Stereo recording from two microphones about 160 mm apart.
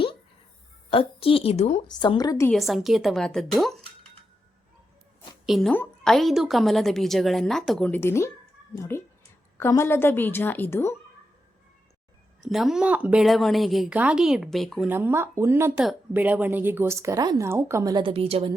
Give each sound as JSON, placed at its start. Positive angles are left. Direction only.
{"t": 0.9, "sound": "a woman's voice", "side_deg": 35}
{"t": 1.9, "sound": "a woman's voice", "side_deg": 25}
{"t": 2.5, "sound": "a woman's voice", "side_deg": 0}
{"t": 5.5, "sound": "a woman's voice", "side_deg": 0}
{"t": 12.4, "sound": "a woman's voice", "side_deg": 0}
{"t": 14.8, "sound": "speech", "side_deg": -15}